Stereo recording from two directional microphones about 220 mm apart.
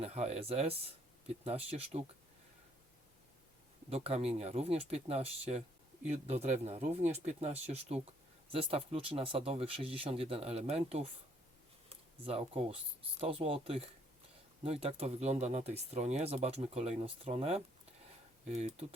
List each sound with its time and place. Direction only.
0.0 s speech: 30° right (ahead or behind)
3.8 s speech: 25° right (ahead or behind)